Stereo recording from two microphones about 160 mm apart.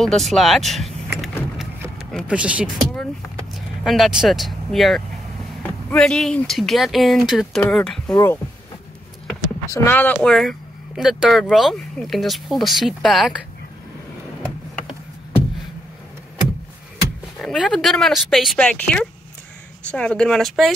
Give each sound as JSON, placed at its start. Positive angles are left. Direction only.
{"t": 0.0, "sound": "speech", "side_deg": 0}
{"t": 8.1, "sound": "speech", "side_deg": 20}
{"t": 9.7, "sound": "speech", "side_deg": 10}
{"t": 10.1, "sound": "speech", "side_deg": 0}
{"t": 17.4, "sound": "speech", "side_deg": 0}